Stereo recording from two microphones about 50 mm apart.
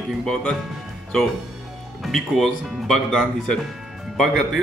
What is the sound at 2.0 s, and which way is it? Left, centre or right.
Speech, centre.